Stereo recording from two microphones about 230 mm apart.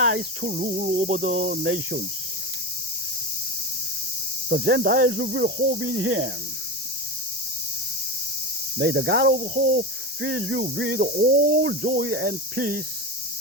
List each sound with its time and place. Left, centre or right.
0.0 s cricket: right
0.4 s speech: right
1.6 s cricket: right
4.4 s speech: right
8.8 s speech: right
9.4 s cricket: right
10.6 s speech: right